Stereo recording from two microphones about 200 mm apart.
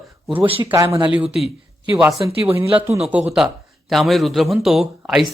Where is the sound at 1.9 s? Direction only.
15° right (ahead or behind).